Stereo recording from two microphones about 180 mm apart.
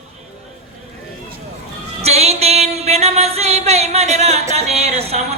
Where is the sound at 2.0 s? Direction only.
35° right (ahead or behind).